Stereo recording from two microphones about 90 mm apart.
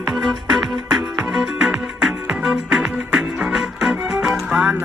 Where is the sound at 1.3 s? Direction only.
5° right (ahead or behind).